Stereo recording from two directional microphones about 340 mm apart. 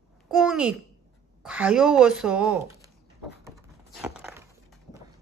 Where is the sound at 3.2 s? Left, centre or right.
Centre.